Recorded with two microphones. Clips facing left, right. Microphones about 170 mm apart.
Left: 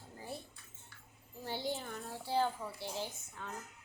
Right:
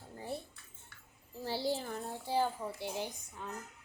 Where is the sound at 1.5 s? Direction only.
35° right (ahead or behind).